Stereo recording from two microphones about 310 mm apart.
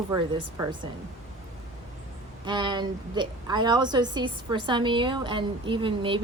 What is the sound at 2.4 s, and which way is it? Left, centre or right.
A woman's voice, centre.